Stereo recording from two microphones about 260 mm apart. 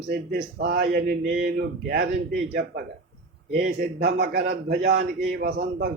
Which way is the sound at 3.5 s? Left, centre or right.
Right.